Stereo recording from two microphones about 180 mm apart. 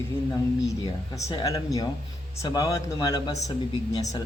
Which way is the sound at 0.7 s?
20° left (ahead or behind).